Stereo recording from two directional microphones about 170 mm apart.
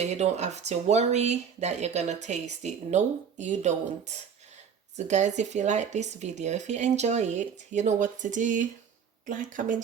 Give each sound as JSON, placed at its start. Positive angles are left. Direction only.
{"t": 0.0, "sound": "speech", "side_deg": -40}